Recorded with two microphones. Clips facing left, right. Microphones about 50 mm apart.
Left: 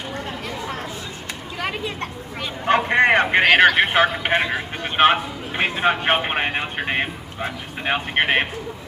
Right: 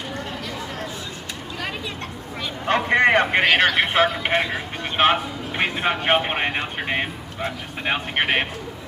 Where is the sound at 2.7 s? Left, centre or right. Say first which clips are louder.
Left 2 dB; centre.